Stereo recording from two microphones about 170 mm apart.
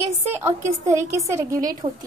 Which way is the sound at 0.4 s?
15° right (ahead or behind).